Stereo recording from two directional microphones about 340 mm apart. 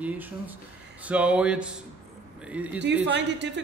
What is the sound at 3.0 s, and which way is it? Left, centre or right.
Speech, right.